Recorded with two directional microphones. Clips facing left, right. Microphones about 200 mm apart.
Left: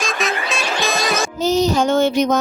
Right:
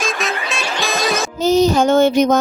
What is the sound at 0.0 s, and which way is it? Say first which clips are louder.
Music: even; centre (ahead or behind).